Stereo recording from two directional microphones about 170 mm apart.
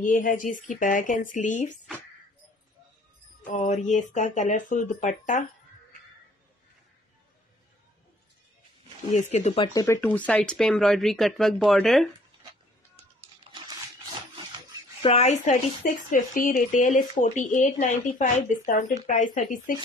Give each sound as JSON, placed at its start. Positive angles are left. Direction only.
{"t": 0.0, "sound": "speech", "side_deg": 50}
{"t": 3.5, "sound": "speech", "side_deg": 45}
{"t": 9.1, "sound": "speech", "side_deg": 40}
{"t": 9.8, "sound": "speech", "side_deg": 15}
{"t": 15.0, "sound": "speech", "side_deg": 40}
{"t": 16.1, "sound": "speech", "side_deg": 50}